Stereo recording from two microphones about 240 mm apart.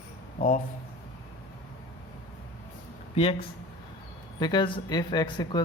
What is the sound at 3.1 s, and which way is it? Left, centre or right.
Speech, left.